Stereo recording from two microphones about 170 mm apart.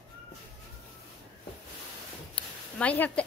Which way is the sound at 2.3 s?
10° left (ahead or behind).